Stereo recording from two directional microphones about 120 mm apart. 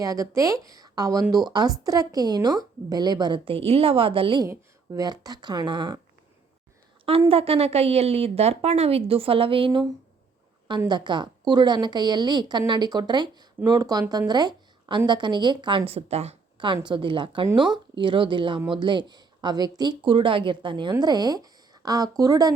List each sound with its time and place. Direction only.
0.0 s a woman's voice: 30° right (ahead or behind); by 4.4 s 45° right (ahead or behind)
4.4 s a woman's voice: 30° right (ahead or behind)
7.3 s a woman's voice: 55° right (ahead or behind)
10.8 s a woman's voice: 40° right (ahead or behind)
15.9 s a woman's voice: 60° right (ahead or behind)
16.6 s a woman's voice: 40° right (ahead or behind)